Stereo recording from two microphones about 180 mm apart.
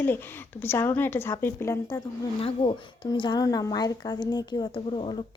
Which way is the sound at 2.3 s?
30° left (ahead or behind).